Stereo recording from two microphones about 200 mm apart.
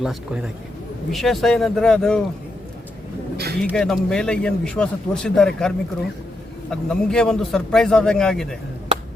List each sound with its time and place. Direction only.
0.0 s a man's voice: centre (ahead or behind)
3.3 s speech: 50° right (ahead or behind)
3.6 s a man's voice: 5° left (ahead or behind)